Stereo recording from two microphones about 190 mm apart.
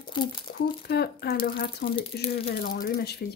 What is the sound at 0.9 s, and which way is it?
Speech, 55° left (ahead or behind).